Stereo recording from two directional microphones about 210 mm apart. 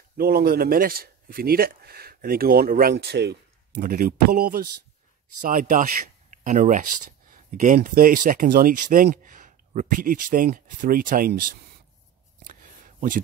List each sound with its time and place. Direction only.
0.2 s a man's voice: 45° right (ahead or behind)